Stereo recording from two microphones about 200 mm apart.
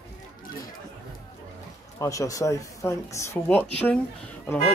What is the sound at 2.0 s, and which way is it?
Speech, 15° left (ahead or behind).